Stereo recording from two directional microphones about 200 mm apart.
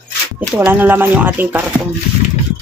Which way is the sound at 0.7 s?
10° right (ahead or behind).